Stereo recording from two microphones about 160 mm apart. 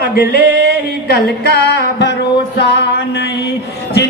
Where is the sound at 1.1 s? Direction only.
90° left.